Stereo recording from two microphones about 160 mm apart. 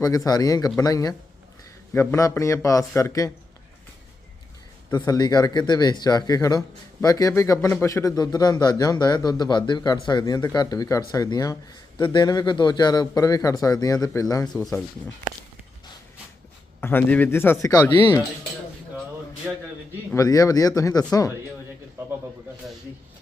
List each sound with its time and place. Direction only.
0.0 s a man's voice: 20° left (ahead or behind)
4.9 s a man's voice: 20° left (ahead or behind)
14.5 s speech: centre (ahead or behind)
16.8 s speech: 10° left (ahead or behind)
19.4 s a man's voice: 10° right (ahead or behind)
20.1 s a man's voice: 20° left (ahead or behind)